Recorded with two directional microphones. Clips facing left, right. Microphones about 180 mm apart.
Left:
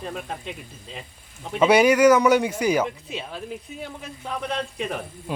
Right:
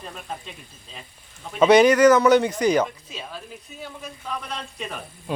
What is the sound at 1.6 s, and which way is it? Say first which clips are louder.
Speech: right 2 dB; 10° left (ahead or behind).